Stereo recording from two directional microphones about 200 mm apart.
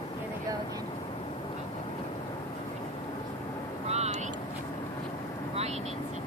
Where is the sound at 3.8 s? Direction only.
35° right (ahead or behind).